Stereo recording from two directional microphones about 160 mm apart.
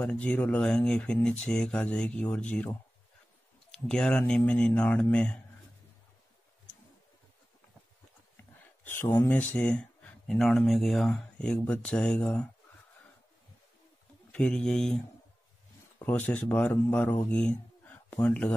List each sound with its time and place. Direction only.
0.0 s speech: 10° left (ahead or behind)
3.7 s speech: 5° left (ahead or behind)
8.8 s speech: 15° left (ahead or behind)
14.3 s speech: 5° left (ahead or behind)
16.0 s speech: 10° left (ahead or behind)